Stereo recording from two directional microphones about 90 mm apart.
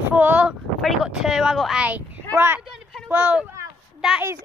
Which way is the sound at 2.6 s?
5° right (ahead or behind).